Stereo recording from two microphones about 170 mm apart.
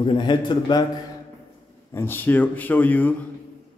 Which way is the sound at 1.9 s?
10° left (ahead or behind).